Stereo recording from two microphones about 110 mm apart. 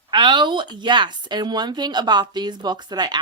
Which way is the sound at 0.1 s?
45° right (ahead or behind).